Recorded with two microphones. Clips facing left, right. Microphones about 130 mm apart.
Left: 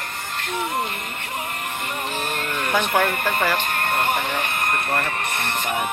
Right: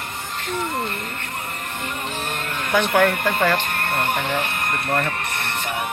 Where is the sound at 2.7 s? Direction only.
10° left (ahead or behind).